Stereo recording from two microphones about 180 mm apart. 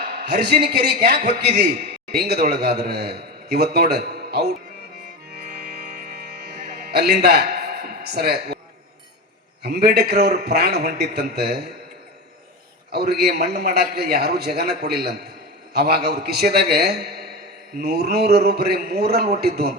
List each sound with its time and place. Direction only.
0.0 s a sound: 60° right (ahead or behind)
0.6 s a man's voice: 65° right (ahead or behind)
6.9 s speech: 65° right (ahead or behind)
9.6 s a man's voice: 60° right (ahead or behind)
12.9 s a man's voice: 65° right (ahead or behind)